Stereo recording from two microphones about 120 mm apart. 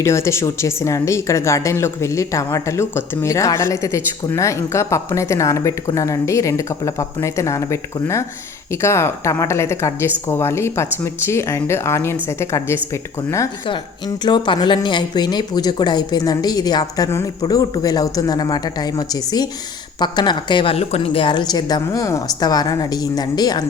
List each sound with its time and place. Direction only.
0.0 s a woman's voice: 25° left (ahead or behind)
14.3 s a woman's voice: 40° left (ahead or behind)